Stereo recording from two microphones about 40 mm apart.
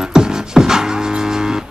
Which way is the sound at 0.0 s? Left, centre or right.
Centre.